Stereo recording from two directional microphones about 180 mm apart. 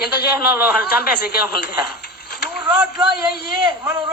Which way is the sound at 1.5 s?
65° left (ahead or behind).